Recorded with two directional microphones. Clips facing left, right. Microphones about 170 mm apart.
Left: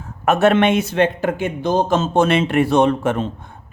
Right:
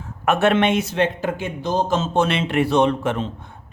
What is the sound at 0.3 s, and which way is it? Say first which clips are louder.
Speech: left 3 dB; 40° left (ahead or behind).